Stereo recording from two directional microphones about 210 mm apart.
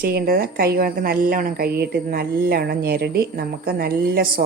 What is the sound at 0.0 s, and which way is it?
Speech, 45° right (ahead or behind).